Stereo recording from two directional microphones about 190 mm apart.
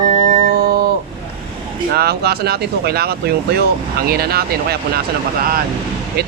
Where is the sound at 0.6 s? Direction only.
55° right (ahead or behind).